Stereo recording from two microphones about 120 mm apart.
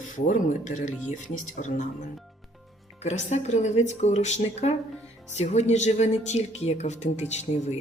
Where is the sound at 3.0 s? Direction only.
70° left (ahead or behind).